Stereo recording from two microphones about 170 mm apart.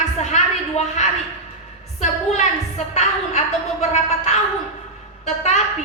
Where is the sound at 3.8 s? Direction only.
40° left (ahead or behind).